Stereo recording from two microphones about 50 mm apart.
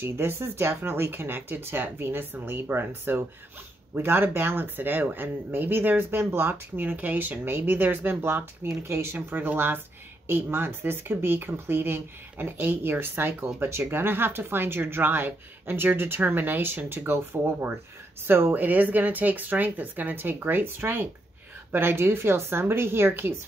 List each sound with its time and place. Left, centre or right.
0.0 s speech: right
7.4 s speech: right
18.5 s speech: right